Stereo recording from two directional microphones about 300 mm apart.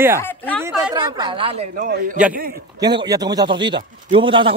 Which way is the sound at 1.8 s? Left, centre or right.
Right.